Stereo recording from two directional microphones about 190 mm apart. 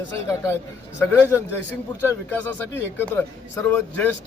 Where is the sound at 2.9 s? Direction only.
10° left (ahead or behind).